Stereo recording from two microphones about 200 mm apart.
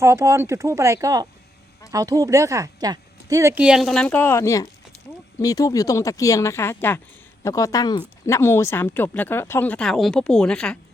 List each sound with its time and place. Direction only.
0.0 s speech: 15° right (ahead or behind); by 10.8 s 5° left (ahead or behind)